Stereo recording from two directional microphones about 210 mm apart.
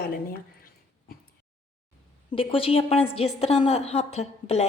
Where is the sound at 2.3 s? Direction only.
25° left (ahead or behind).